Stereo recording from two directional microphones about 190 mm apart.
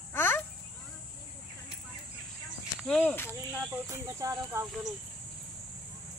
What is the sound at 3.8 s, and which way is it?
Speech, 15° right (ahead or behind).